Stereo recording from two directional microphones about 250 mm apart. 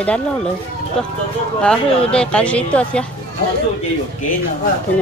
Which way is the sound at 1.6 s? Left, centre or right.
Centre.